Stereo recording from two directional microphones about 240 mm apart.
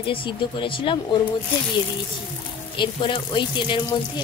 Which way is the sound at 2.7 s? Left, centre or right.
Centre.